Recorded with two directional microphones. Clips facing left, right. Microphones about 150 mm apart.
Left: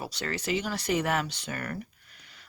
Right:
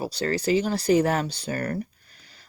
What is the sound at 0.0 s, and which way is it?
Speech, 35° right (ahead or behind).